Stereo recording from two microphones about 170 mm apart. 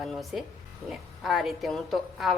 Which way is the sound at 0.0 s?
Centre (ahead or behind).